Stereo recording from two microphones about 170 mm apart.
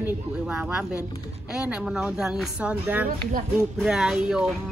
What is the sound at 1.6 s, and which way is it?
Speech, 5° right (ahead or behind).